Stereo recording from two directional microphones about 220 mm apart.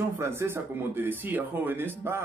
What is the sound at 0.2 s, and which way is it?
Speech, 10° right (ahead or behind).